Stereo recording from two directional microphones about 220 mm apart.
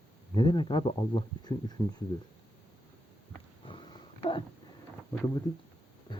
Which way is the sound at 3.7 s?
20° left (ahead or behind).